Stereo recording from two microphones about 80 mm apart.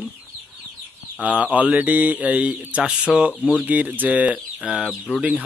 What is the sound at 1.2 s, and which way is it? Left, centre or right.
Speech, centre.